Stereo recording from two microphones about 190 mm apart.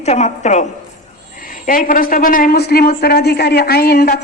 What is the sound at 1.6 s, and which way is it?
A man's voice, 45° left (ahead or behind).